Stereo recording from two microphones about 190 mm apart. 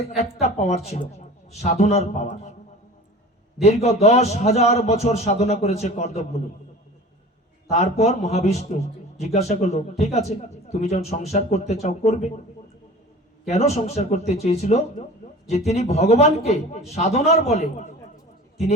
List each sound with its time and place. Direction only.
0.2 s a man's voice: 35° left (ahead or behind)
3.6 s a man's voice: 35° left (ahead or behind)
7.7 s a man's voice: 35° left (ahead or behind)
13.5 s a man's voice: 35° left (ahead or behind)